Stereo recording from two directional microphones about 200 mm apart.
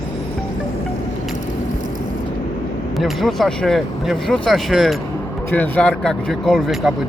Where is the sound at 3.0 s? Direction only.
Centre (ahead or behind).